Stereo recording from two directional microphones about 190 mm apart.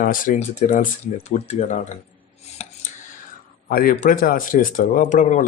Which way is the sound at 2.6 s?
35° left (ahead or behind).